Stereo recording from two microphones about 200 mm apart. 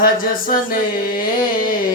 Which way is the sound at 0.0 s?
45° left (ahead or behind).